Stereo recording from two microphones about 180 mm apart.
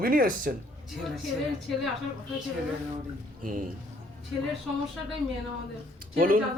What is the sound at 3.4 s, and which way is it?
Speech, 50° right (ahead or behind).